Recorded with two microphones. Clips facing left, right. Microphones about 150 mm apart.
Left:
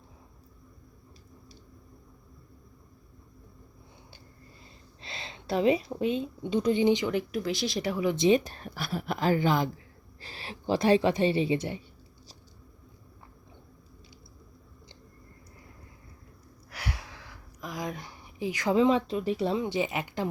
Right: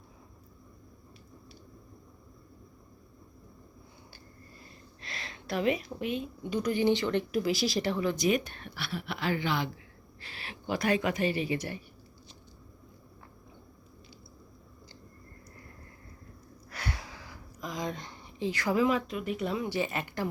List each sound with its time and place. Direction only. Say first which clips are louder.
4.9 s a woman's voice: left 2 dB; 25° left (ahead or behind)
7.1 s speech: right 1 dB; centre (ahead or behind)
8.0 s a woman's voice: left 8 dB; 25° left (ahead or behind)
16.6 s speech: even; 10° left (ahead or behind)